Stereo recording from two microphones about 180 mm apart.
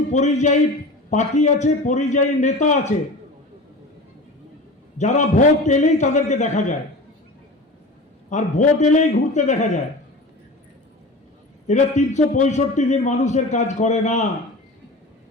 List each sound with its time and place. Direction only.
0.1 s a man's voice: 40° left (ahead or behind)
4.9 s a man's voice: 40° left (ahead or behind)
8.3 s a man's voice: 40° left (ahead or behind)
11.7 s a man's voice: 40° left (ahead or behind)